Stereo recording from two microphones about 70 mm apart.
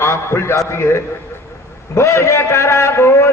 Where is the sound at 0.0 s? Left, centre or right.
Left.